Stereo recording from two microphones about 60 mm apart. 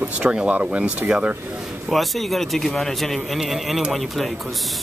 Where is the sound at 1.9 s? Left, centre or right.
Centre.